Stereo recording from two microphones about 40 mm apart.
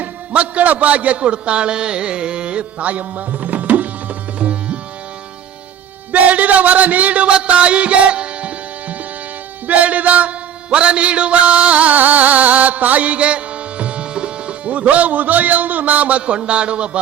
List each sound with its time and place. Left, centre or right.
0.0 s a man's voice: right
4.4 s tabla: right
6.1 s a sound: right
9.6 s music: right